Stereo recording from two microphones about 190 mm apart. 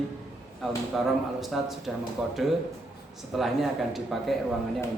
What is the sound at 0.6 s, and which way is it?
Speech, centre (ahead or behind).